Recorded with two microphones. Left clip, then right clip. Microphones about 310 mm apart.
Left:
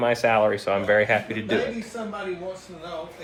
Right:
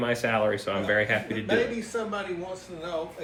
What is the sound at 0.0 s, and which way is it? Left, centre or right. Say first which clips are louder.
Speech: left 5 dB; centre.